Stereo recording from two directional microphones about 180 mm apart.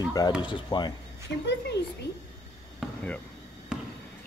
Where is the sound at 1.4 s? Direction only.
75° left (ahead or behind).